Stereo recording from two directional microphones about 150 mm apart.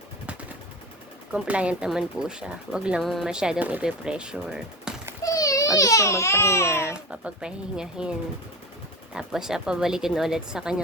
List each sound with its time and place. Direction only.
1.3 s speech: 10° right (ahead or behind)
5.2 s speech: 25° left (ahead or behind)
7.1 s speech: 5° right (ahead or behind)
9.1 s speech: 5° right (ahead or behind)